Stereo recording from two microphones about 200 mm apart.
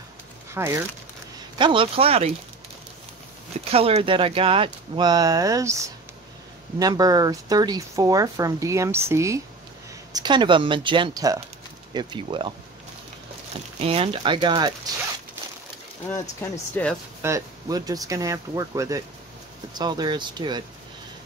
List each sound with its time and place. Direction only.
0.6 s speech: 15° right (ahead or behind)
1.6 s speech: 25° right (ahead or behind)
3.7 s speech: 30° right (ahead or behind)
13.7 s speech: 30° right (ahead or behind)
16.1 s speech: 10° left (ahead or behind)
17.2 s speech: 15° right (ahead or behind)